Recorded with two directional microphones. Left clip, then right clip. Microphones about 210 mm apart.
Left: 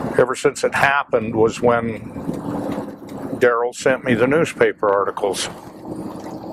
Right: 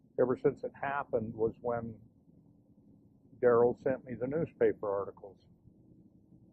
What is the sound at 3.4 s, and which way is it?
Speech, 15° left (ahead or behind).